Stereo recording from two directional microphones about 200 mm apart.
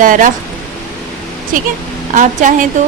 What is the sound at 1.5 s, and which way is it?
Speech, 40° right (ahead or behind).